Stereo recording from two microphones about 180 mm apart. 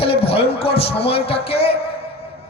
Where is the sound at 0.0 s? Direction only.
30° left (ahead or behind).